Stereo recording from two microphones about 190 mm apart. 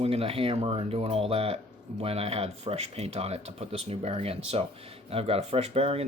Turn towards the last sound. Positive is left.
turn(degrees=-30)  # may be behind; listen again after turning